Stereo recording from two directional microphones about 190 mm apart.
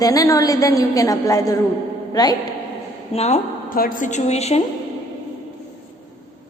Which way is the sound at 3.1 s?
35° left (ahead or behind).